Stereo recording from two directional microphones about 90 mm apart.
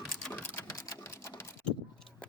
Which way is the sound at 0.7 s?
35° left (ahead or behind).